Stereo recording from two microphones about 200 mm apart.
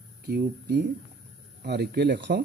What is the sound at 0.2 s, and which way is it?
Speech, 55° right (ahead or behind).